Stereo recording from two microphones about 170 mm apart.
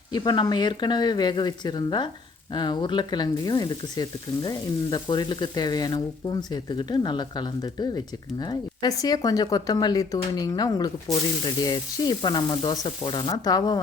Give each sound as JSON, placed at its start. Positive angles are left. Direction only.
{"t": 0.1, "sound": "sizzle", "side_deg": 25}